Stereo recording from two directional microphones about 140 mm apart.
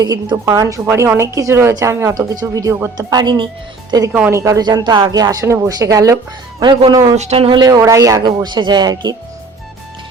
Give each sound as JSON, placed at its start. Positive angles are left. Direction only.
{"t": 0.0, "sound": "a woman's voice", "side_deg": -30}
{"t": 4.3, "sound": "a woman's voice", "side_deg": -20}
{"t": 7.2, "sound": "speech", "side_deg": -45}
{"t": 7.6, "sound": "a woman's voice", "side_deg": -25}